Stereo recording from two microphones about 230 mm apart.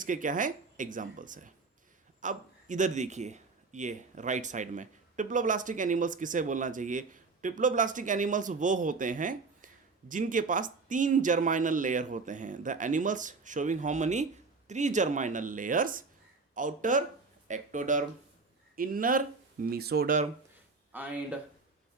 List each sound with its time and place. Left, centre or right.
0.0 s a man's voice: right
20.9 s speech: centre